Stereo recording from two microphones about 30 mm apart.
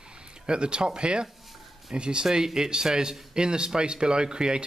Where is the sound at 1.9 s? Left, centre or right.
Right.